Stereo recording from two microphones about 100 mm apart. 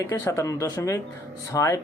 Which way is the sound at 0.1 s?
30° left (ahead or behind).